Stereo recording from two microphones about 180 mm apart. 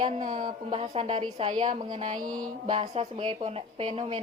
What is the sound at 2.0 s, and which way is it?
Mantra, 45° right (ahead or behind).